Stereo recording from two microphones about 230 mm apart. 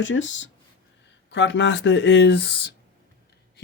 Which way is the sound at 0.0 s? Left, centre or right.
Left.